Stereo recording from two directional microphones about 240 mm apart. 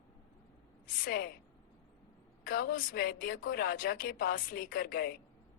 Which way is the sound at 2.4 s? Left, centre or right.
Left.